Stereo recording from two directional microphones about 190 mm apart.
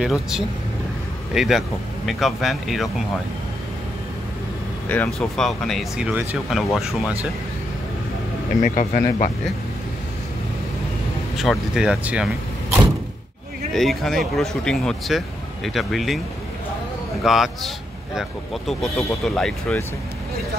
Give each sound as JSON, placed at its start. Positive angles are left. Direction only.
{"t": 0.0, "sound": "speech", "side_deg": 0}
{"t": 4.8, "sound": "speech", "side_deg": 10}
{"t": 8.6, "sound": "speech", "side_deg": 45}
{"t": 11.3, "sound": "speech", "side_deg": 0}
{"t": 13.7, "sound": "speech", "side_deg": 0}
{"t": 17.2, "sound": "speech", "side_deg": 0}